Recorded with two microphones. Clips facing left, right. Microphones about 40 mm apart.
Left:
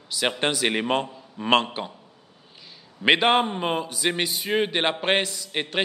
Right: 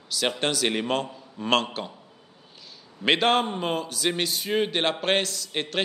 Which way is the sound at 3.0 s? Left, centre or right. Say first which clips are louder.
Left 2 dB; centre.